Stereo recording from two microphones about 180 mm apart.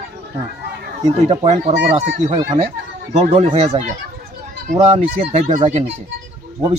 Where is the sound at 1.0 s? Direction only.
30° right (ahead or behind).